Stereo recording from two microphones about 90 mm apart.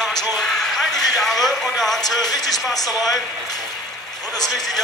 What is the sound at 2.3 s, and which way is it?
Speech, 45° left (ahead or behind).